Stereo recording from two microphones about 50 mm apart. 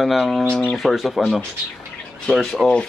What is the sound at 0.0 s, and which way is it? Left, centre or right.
A man's voice, centre.